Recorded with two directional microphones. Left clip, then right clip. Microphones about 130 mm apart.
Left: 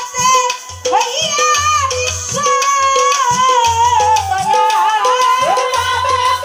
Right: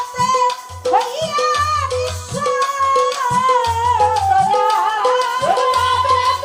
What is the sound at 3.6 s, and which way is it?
Music, 15° left (ahead or behind).